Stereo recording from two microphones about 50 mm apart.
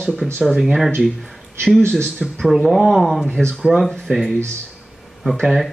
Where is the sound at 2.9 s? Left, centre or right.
Centre.